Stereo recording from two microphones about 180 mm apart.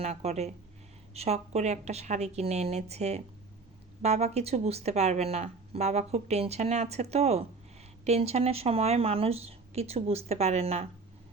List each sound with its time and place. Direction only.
0.0 s speech: 35° right (ahead or behind)